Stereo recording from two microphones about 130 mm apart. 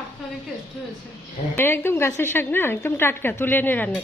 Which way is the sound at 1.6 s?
20° left (ahead or behind).